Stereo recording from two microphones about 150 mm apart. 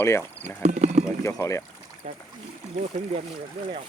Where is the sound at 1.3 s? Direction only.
20° left (ahead or behind).